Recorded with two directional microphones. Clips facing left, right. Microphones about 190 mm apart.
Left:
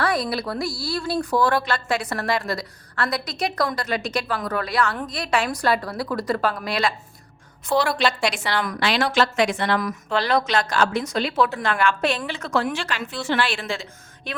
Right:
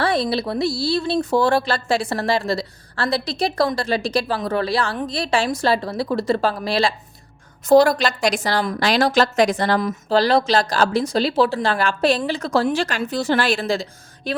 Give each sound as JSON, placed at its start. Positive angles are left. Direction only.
{"t": 0.0, "sound": "speech", "side_deg": -25}
{"t": 7.7, "sound": "speech", "side_deg": -40}